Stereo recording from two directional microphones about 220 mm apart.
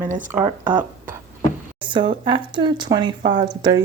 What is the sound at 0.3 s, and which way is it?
Speech, 10° right (ahead or behind).